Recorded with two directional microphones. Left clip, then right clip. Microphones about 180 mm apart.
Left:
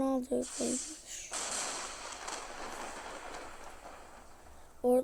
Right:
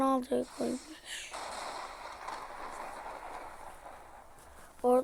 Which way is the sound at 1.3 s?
40° left (ahead or behind).